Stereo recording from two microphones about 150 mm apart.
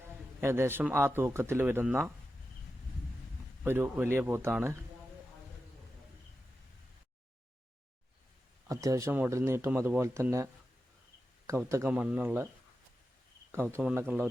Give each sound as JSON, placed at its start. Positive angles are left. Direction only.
{"t": 0.4, "sound": "a man's voice", "side_deg": -15}
{"t": 3.6, "sound": "a man's voice", "side_deg": -15}
{"t": 8.6, "sound": "a man's voice", "side_deg": -20}
{"t": 13.5, "sound": "a man's voice", "side_deg": -15}